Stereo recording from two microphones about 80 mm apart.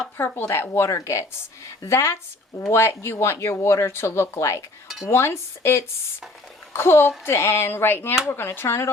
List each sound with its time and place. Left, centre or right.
0.2 s speech: left
0.4 s speech: left